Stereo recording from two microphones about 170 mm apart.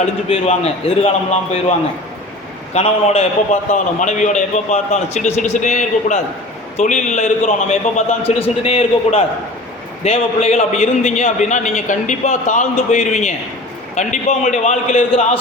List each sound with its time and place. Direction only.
0.3 s a man's voice: 35° left (ahead or behind)
2.7 s a man's voice: 40° left (ahead or behind)